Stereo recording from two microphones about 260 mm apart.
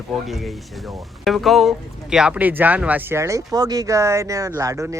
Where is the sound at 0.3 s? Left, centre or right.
Centre.